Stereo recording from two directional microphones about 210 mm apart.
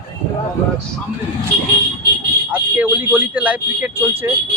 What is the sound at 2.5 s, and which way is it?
A man's voice, 5° right (ahead or behind).